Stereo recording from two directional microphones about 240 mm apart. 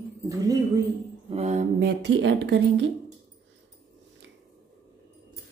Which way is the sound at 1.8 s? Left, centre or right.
Right.